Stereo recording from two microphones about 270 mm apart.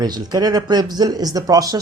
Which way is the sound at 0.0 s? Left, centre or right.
Centre.